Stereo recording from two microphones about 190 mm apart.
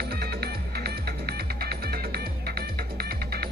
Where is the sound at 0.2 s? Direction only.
55° right (ahead or behind).